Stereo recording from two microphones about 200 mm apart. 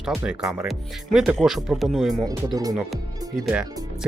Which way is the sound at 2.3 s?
20° right (ahead or behind).